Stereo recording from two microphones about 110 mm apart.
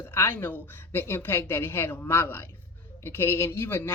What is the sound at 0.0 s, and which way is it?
Speech, 20° left (ahead or behind).